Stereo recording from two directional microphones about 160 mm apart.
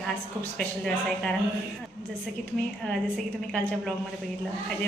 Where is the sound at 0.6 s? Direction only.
5° left (ahead or behind).